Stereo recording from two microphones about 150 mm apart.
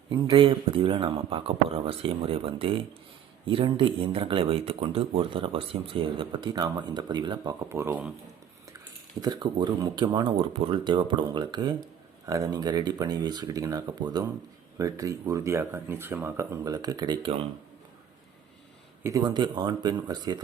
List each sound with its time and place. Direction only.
0.1 s speech: 35° right (ahead or behind)
7.7 s speech: 15° right (ahead or behind)
9.2 s speech: 30° right (ahead or behind)
19.0 s speech: 25° right (ahead or behind)